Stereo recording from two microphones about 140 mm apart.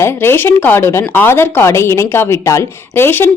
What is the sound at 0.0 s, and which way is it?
Speech, 15° left (ahead or behind).